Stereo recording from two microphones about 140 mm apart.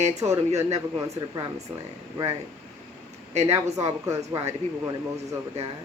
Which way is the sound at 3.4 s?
50° right (ahead or behind).